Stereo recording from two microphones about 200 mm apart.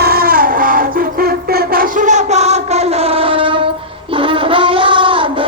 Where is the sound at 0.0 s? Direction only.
50° right (ahead or behind).